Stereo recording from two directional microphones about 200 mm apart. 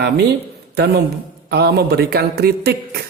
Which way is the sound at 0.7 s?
55° right (ahead or behind).